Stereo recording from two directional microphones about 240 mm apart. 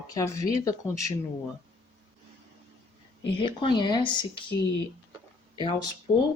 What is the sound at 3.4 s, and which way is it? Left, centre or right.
Speech, centre.